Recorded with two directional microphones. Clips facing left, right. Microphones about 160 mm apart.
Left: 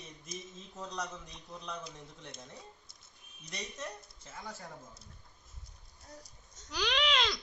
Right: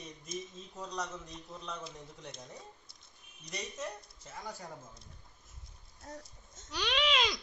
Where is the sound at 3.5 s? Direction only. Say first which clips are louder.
Right 2 dB; 10° right (ahead or behind).